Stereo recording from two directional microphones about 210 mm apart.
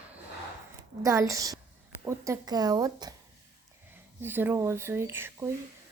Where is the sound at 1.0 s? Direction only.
15° right (ahead or behind).